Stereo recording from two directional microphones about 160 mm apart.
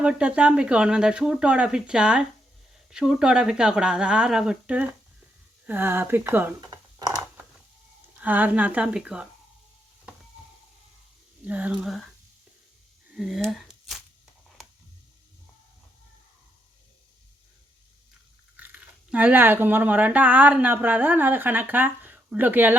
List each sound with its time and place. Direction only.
0.0 s speech: 5° right (ahead or behind)
8.1 s speech: 10° right (ahead or behind)
11.4 s speech: 10° right (ahead or behind)
13.1 s speech: centre (ahead or behind)
13.5 s a sound: centre (ahead or behind)
18.5 s speech: 10° right (ahead or behind)